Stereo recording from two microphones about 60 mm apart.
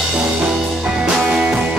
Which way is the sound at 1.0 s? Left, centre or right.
Centre.